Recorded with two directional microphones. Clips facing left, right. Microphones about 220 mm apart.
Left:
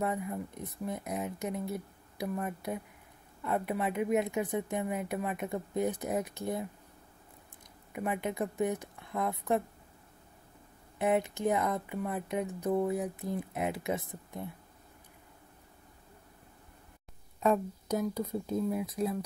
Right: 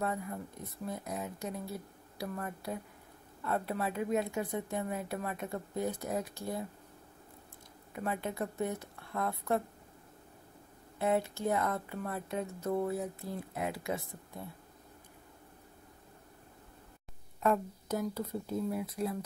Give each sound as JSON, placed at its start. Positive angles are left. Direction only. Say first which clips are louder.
{"t": 0.0, "sound": "speech", "louder": "left 3 dB", "side_deg": 20}
{"t": 7.9, "sound": "speech", "louder": "left 3 dB", "side_deg": 15}
{"t": 11.0, "sound": "speech", "louder": "left 2 dB", "side_deg": 15}
{"t": 17.4, "sound": "speech", "louder": "left 2 dB", "side_deg": 20}